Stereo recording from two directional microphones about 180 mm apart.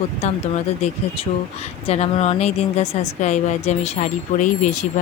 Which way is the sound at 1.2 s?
35° left (ahead or behind).